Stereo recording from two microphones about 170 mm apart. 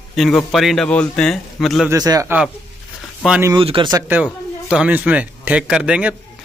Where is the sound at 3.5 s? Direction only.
30° right (ahead or behind).